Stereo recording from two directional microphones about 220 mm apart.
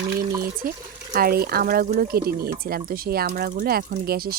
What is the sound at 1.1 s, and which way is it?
Speech, 40° right (ahead or behind).